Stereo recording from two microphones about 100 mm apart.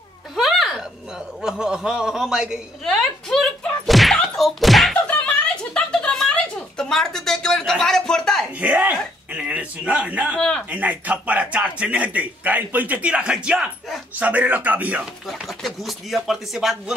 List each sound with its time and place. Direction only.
0.4 s a sound: centre (ahead or behind)
1.4 s a man's voice: 5° right (ahead or behind)
2.8 s thunk: 5° left (ahead or behind)
4.9 s a sound: 15° left (ahead or behind)
8.5 s a man's voice: 15° right (ahead or behind)
10.3 s speech: 10° left (ahead or behind)
10.7 s a man's voice: 15° right (ahead or behind)
14.2 s a man's voice: 15° right (ahead or behind)
15.3 s speech: centre (ahead or behind)